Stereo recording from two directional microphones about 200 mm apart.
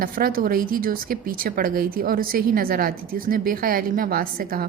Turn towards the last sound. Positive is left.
turn(degrees=-45)  # may be behind; listen again after turning